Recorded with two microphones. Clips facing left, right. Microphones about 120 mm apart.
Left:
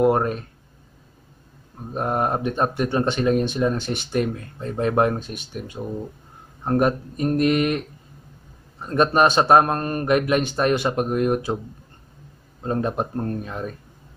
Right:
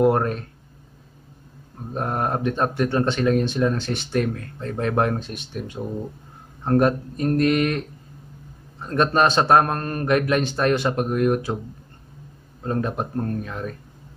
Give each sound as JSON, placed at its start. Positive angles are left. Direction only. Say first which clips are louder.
{"t": 0.0, "sound": "speech", "louder": "even", "side_deg": 10}
{"t": 2.0, "sound": "speech", "louder": "left 2 dB", "side_deg": 15}
{"t": 6.6, "sound": "speech", "louder": "right 1 dB", "side_deg": 10}
{"t": 8.8, "sound": "speech", "louder": "left 1 dB", "side_deg": 15}
{"t": 12.6, "sound": "speech", "louder": "left 1 dB", "side_deg": 20}